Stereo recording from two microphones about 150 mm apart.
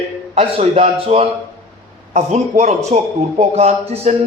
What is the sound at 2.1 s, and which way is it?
A man's voice, 50° right (ahead or behind).